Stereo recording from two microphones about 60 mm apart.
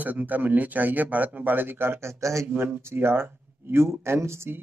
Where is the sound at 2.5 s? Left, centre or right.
Right.